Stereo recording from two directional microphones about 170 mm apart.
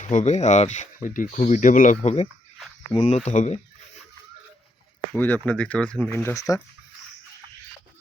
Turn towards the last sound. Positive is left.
turn(degrees=20)  # may be behind; listen again after turning